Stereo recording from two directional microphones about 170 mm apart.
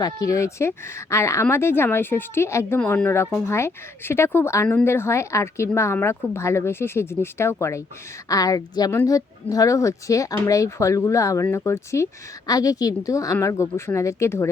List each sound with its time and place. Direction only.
0.0 s a woman's voice: 20° left (ahead or behind)